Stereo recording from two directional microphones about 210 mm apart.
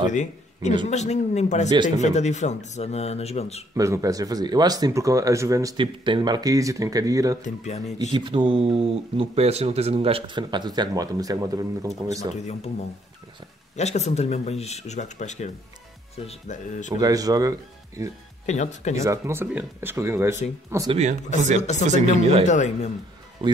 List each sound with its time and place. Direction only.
0.1 s speech: 35° left (ahead or behind)
3.7 s speech: 15° right (ahead or behind)
7.4 s speech: 35° left (ahead or behind)
8.1 s speech: 25° right (ahead or behind)
12.4 s speech: 30° left (ahead or behind)
17.0 s speech: 15° right (ahead or behind)
18.4 s speech: 35° left (ahead or behind)
19.0 s speech: 10° right (ahead or behind)
20.9 s speech: 35° right (ahead or behind)
21.5 s speech: 35° left (ahead or behind)
21.8 s speech: 35° right (ahead or behind)
22.5 s speech: 35° left (ahead or behind)
23.4 s speech: 25° right (ahead or behind)